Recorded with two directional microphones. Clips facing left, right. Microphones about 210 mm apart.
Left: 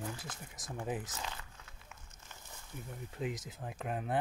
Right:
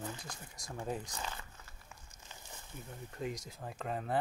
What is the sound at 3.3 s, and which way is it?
Speech, centre (ahead or behind).